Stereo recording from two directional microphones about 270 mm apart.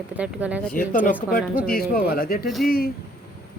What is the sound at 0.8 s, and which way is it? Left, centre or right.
Speech, left.